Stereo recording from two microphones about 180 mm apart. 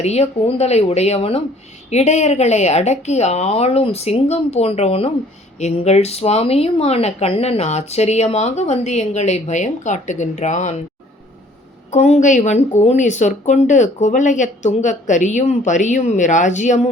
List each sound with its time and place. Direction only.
0.0 s speech: 35° left (ahead or behind)
11.9 s speech: 40° left (ahead or behind)